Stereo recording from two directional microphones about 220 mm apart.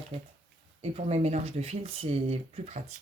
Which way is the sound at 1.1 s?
30° right (ahead or behind).